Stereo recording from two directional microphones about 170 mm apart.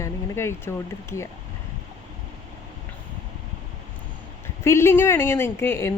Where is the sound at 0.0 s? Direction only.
15° left (ahead or behind).